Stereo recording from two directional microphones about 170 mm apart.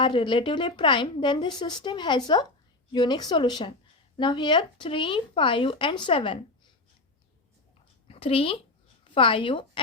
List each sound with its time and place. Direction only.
0.0 s a woman's voice: 30° left (ahead or behind)
8.0 s a sound: 35° left (ahead or behind)
9.1 s speech: 30° left (ahead or behind)